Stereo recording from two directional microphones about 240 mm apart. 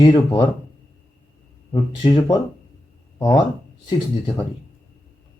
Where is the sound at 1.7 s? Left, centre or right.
Centre.